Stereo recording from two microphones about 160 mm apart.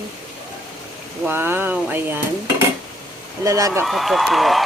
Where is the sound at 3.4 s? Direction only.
20° right (ahead or behind).